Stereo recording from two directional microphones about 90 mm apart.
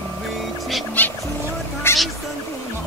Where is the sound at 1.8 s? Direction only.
30° left (ahead or behind).